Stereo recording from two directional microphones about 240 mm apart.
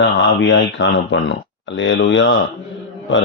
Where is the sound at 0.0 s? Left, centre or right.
Left.